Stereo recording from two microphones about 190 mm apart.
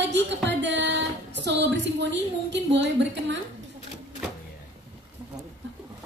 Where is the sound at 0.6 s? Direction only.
70° right (ahead or behind).